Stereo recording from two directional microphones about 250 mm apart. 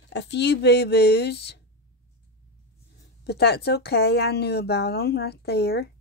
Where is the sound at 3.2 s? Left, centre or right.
Left.